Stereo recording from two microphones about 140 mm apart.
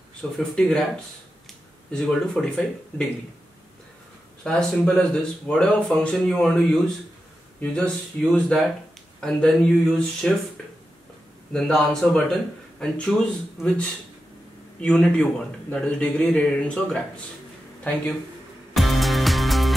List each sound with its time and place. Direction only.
0.2 s speech: 10° left (ahead or behind)
1.9 s speech: 5° left (ahead or behind)
4.5 s speech: 5° left (ahead or behind)
11.5 s speech: 5° left (ahead or behind)
18.8 s music: centre (ahead or behind)